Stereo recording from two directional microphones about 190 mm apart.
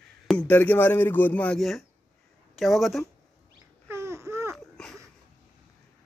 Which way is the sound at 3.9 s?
15° right (ahead or behind).